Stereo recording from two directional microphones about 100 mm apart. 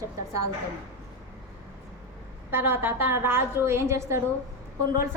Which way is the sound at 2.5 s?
20° right (ahead or behind).